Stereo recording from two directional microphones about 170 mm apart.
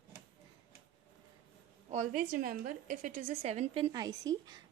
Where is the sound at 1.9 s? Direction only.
50° right (ahead or behind).